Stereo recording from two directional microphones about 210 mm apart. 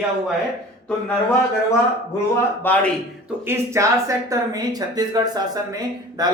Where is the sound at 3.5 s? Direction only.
15° right (ahead or behind).